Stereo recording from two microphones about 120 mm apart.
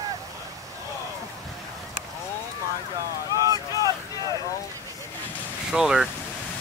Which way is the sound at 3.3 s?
30° right (ahead or behind).